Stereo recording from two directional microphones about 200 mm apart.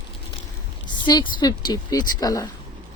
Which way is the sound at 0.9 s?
20° left (ahead or behind).